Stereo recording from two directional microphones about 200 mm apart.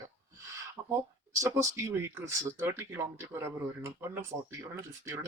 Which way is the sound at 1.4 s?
15° right (ahead or behind).